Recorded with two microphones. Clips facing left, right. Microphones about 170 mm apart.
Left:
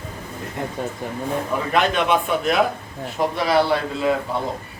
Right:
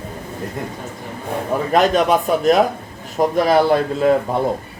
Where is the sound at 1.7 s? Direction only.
40° right (ahead or behind).